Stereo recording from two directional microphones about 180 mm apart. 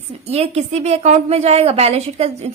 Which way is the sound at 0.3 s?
35° right (ahead or behind).